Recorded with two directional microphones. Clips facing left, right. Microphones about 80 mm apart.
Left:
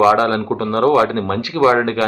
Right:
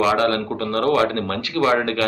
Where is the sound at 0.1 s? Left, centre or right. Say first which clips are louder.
Left 4 dB; left.